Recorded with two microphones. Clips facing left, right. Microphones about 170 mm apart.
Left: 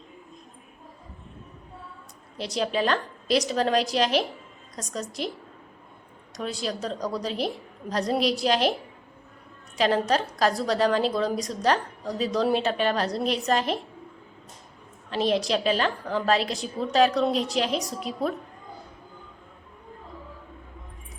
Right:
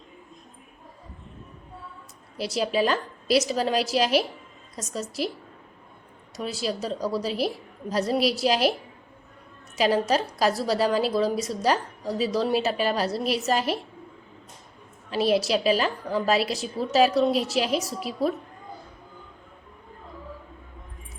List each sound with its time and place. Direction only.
2.4 s a woman's voice: 5° right (ahead or behind)
6.3 s a woman's voice: 5° right (ahead or behind)
9.7 s a woman's voice: 5° right (ahead or behind)
15.1 s a woman's voice: 5° right (ahead or behind)